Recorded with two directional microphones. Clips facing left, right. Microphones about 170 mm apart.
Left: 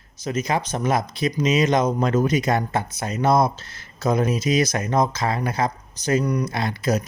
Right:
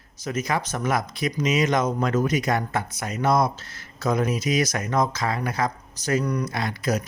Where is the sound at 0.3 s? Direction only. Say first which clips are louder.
Left 2 dB; 20° left (ahead or behind).